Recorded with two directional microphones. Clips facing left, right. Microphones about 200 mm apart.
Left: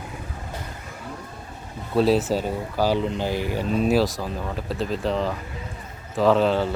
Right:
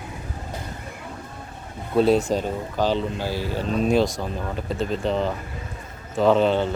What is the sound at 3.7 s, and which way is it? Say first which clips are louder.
Speech: right 1 dB; 5° left (ahead or behind).